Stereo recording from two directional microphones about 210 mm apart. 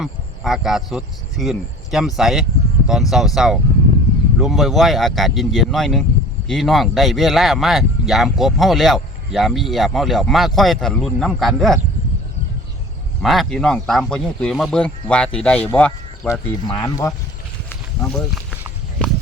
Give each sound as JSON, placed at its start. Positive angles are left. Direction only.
{"t": 0.0, "sound": "speech", "side_deg": 0}
{"t": 13.2, "sound": "speech", "side_deg": 0}
{"t": 16.6, "sound": "speech", "side_deg": 20}
{"t": 17.7, "sound": "snake", "side_deg": 5}